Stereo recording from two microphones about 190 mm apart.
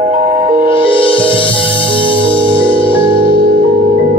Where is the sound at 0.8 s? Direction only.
25° left (ahead or behind).